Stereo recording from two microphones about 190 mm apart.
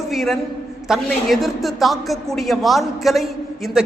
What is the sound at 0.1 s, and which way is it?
A man's voice, centre (ahead or behind).